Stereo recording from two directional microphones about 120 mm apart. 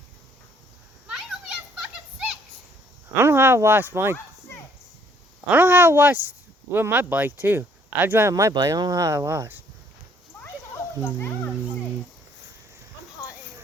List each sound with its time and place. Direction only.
1.0 s children playing: 5° right (ahead or behind)
3.2 s speech: 20° right (ahead or behind)
5.5 s speech: 15° right (ahead or behind)
10.3 s a sound: 15° left (ahead or behind)